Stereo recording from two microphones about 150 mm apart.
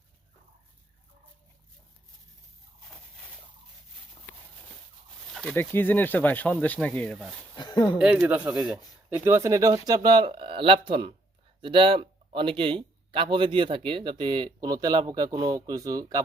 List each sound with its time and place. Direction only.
5.3 s speech: 5° left (ahead or behind)
7.5 s a sound: 30° left (ahead or behind)
7.9 s speech: 5° right (ahead or behind)
9.1 s speech: 20° right (ahead or behind)